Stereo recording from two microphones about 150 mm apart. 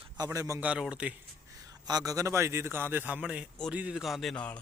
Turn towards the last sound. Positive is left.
turn(degrees=10)  # may be behind; listen again after turning